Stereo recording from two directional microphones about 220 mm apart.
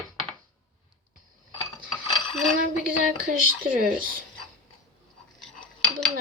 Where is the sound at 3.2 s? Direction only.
40° right (ahead or behind).